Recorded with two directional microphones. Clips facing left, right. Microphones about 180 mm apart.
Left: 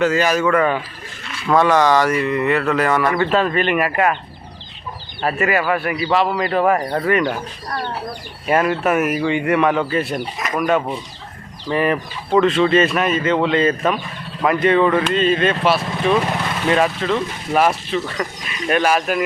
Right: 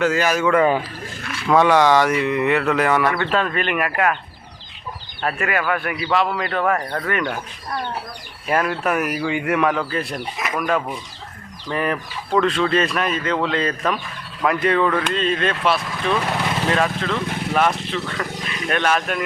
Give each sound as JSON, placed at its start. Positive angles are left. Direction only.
{"t": 0.1, "sound": "speech", "side_deg": -5}
{"t": 0.6, "sound": "speech", "side_deg": -20}
{"t": 1.5, "sound": "mantra", "side_deg": -10}
{"t": 3.1, "sound": "speech", "side_deg": 0}
{"t": 5.2, "sound": "speech", "side_deg": 5}
{"t": 6.7, "sound": "speech", "side_deg": 20}
{"t": 7.1, "sound": "speech", "side_deg": 5}
{"t": 8.4, "sound": "speech", "side_deg": 5}